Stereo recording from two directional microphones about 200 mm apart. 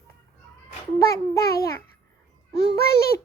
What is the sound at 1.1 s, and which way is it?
Speech, 15° left (ahead or behind).